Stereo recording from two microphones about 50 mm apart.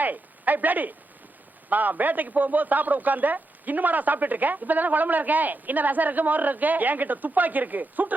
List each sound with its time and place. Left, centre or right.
0.0 s a man's voice: right